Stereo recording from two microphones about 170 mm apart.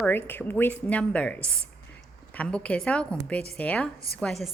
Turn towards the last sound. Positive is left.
turn(degrees=0)  # may be behind; listen again after turning